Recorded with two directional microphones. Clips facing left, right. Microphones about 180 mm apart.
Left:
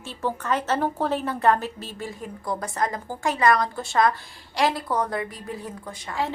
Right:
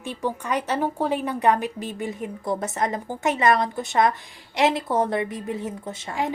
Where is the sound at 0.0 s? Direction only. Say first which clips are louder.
Right 1 dB; 15° right (ahead or behind).